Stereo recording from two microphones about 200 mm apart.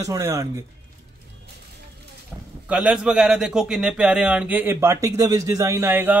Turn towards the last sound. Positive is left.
turn(degrees=-10)  # may be behind; listen again after turning